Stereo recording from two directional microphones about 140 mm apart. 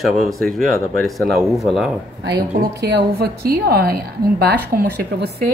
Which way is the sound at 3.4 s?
90° right.